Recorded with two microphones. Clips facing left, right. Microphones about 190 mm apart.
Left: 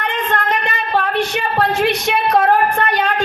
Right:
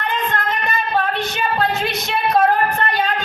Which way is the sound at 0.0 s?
75° left (ahead or behind).